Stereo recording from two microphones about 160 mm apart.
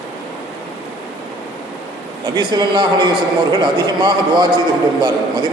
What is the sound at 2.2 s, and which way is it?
A man's voice, 25° right (ahead or behind).